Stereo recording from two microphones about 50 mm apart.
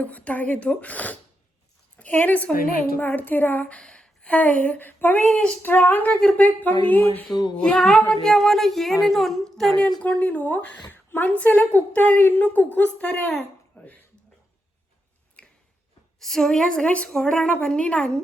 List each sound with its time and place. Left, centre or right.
0.0 s a woman's voice: left
3.7 s a sound: left
4.4 s a woman's voice: left
4.9 s speech: left
5.2 s speech: centre
5.6 s a woman's voice: left
7.5 s speech: centre
9.7 s a woman's voice: left
13.1 s a woman's voice: left
15.4 s a sound: left
16.2 s speech: centre
16.9 s a woman's voice: left